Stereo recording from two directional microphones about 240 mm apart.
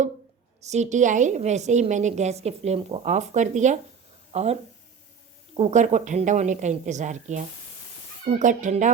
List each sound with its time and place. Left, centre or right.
0.6 s a woman's voice: right
5.5 s a woman's voice: right